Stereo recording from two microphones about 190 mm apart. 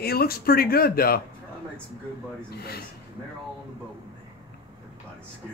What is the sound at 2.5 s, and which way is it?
Speech, 55° left (ahead or behind).